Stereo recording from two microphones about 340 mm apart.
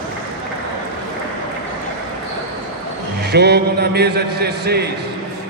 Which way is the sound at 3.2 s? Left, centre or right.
Right.